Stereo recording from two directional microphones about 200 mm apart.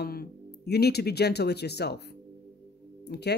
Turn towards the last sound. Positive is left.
turn(degrees=55)  # may be behind; listen again after turning